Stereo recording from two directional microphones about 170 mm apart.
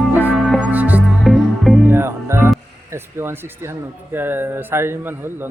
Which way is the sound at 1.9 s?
15° right (ahead or behind).